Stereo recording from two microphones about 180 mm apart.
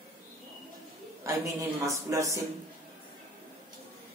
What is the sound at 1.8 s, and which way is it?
Speech, 15° right (ahead or behind).